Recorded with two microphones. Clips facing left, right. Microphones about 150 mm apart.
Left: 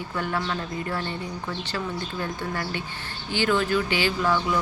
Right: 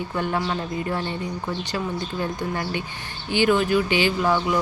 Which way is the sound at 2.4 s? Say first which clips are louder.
Right 3 dB; 20° right (ahead or behind).